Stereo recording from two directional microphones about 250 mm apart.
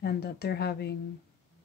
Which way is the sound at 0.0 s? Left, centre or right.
Left.